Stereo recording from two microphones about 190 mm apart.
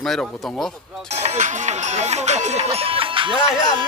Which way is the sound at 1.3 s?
40° right (ahead or behind).